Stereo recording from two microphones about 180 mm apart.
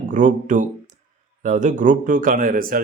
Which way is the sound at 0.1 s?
45° right (ahead or behind).